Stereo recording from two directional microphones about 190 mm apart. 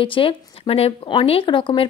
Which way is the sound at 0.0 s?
25° left (ahead or behind).